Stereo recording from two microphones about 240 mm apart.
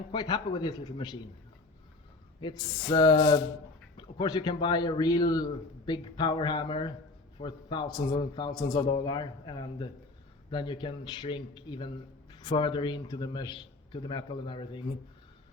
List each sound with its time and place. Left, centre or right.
0.1 s a man's voice: centre
2.4 s a man's voice: centre